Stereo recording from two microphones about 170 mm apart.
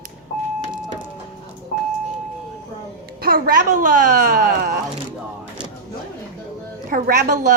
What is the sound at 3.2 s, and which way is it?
Speech, 60° right (ahead or behind).